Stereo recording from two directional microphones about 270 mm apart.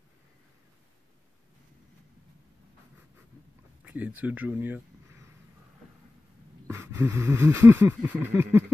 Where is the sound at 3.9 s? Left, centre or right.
Centre.